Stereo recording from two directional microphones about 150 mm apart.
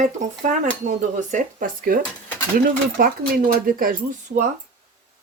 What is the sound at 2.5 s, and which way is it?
Speech, 75° right (ahead or behind).